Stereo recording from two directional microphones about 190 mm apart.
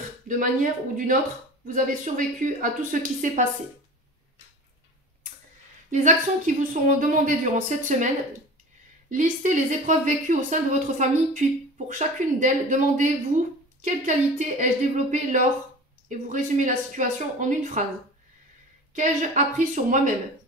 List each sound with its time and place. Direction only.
0.3 s speech: 45° right (ahead or behind)
5.9 s speech: 40° right (ahead or behind)
9.1 s speech: 40° right (ahead or behind)
18.9 s speech: 40° right (ahead or behind)